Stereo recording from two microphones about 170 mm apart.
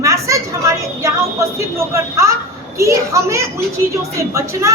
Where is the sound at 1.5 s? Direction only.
20° right (ahead or behind).